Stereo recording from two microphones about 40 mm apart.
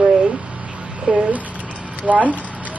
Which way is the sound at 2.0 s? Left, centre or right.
Right.